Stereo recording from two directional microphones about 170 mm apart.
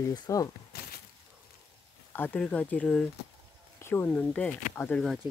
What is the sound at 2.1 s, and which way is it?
Speech, 10° left (ahead or behind).